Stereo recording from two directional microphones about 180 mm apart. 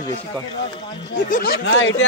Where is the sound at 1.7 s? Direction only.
90° left.